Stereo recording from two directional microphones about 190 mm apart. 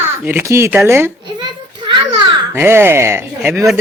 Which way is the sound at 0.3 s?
10° right (ahead or behind).